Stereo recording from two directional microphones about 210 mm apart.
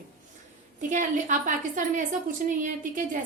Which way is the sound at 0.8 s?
35° right (ahead or behind).